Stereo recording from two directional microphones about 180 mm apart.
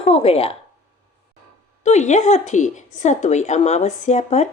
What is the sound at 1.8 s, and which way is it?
A woman's voice, 40° left (ahead or behind).